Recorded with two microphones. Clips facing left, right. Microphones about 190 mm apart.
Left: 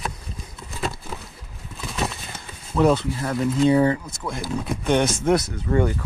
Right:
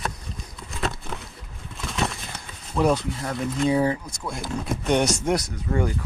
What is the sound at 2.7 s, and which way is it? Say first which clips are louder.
Speech: left 3 dB; 10° right (ahead or behind).